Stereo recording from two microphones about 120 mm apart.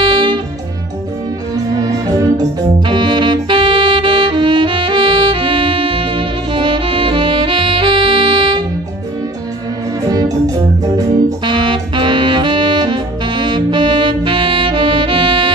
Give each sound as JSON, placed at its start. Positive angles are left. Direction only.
{"t": 0.0, "sound": "music", "side_deg": -40}
{"t": 1.5, "sound": "music", "side_deg": -30}
{"t": 2.9, "sound": "music", "side_deg": -40}
{"t": 10.0, "sound": "music", "side_deg": -30}
{"t": 11.4, "sound": "saxophone", "side_deg": -40}